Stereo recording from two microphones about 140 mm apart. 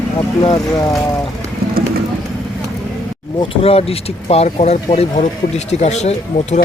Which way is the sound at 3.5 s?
45° left (ahead or behind).